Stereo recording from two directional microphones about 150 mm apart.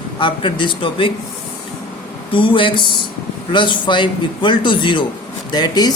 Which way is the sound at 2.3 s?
35° left (ahead or behind).